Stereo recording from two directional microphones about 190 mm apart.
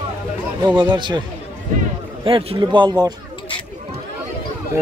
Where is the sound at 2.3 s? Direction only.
25° right (ahead or behind).